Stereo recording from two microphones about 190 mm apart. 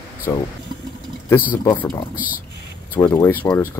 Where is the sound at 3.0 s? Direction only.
15° left (ahead or behind).